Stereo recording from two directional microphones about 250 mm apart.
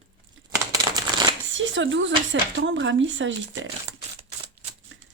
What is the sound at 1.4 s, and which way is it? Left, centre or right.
Speech, right.